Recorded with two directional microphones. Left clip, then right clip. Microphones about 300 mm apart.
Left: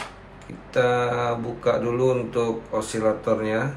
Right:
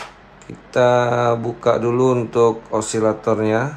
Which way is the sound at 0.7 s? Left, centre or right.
Centre.